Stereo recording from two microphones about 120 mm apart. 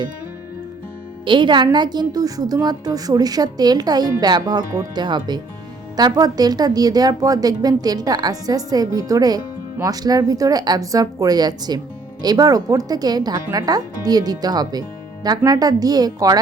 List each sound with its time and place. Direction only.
1.2 s a woman's voice: 45° right (ahead or behind)